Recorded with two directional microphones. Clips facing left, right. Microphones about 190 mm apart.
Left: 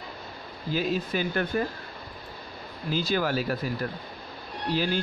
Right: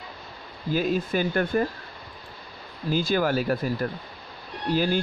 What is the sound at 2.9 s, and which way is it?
Speech, 50° right (ahead or behind).